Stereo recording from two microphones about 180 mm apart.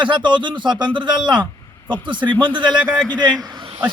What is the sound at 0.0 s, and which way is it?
A man's voice, 25° right (ahead or behind).